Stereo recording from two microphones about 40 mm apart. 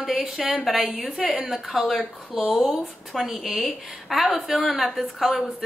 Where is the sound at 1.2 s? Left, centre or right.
Right.